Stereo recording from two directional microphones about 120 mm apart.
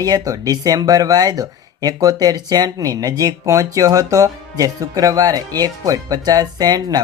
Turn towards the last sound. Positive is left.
turn(degrees=-35)  # may be behind; listen again after turning